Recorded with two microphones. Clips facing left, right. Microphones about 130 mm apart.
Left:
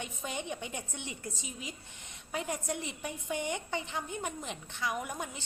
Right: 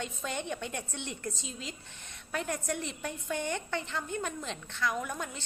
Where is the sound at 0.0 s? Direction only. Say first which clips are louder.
Right 2 dB; 15° left (ahead or behind).